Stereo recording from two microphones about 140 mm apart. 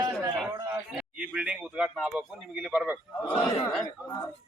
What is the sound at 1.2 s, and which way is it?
A man's voice, 10° right (ahead or behind).